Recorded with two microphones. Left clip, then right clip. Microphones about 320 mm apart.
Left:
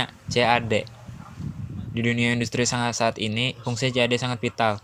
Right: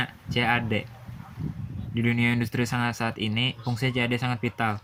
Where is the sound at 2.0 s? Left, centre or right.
Centre.